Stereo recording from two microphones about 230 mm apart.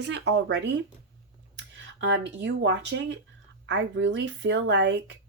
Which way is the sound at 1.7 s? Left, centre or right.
Right.